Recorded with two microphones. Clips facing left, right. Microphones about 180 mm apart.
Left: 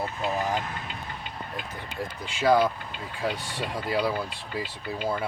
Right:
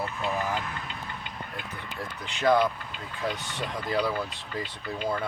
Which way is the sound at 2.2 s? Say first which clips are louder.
Left 1 dB; 10° left (ahead or behind).